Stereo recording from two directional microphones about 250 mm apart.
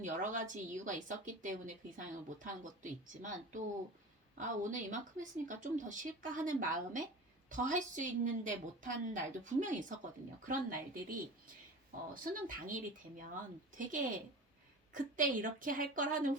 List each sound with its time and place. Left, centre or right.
0.0 s a woman's voice: right